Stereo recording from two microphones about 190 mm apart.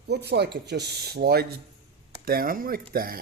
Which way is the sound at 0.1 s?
60° right (ahead or behind).